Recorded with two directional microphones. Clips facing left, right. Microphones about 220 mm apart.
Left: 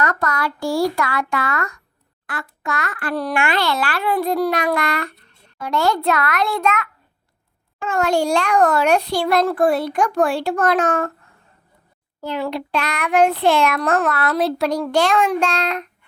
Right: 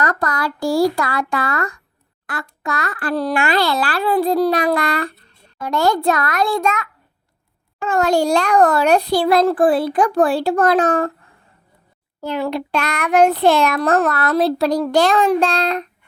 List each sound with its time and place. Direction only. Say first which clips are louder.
0.0 s a child's voice: right 1 dB; 35° right (ahead or behind)
7.8 s a child's voice: right 2 dB; 35° right (ahead or behind)
12.2 s a child's voice: right 2 dB; 45° right (ahead or behind)